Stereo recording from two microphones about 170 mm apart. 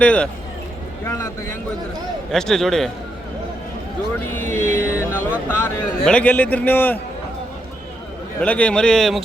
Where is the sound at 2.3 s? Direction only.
5° left (ahead or behind).